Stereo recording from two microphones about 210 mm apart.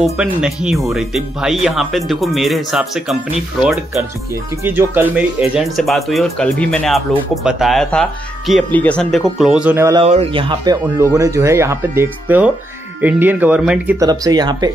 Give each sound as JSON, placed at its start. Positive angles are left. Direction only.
{"t": 0.0, "sound": "speech", "side_deg": -5}
{"t": 10.0, "sound": "speech", "side_deg": -30}
{"t": 13.9, "sound": "speech", "side_deg": -15}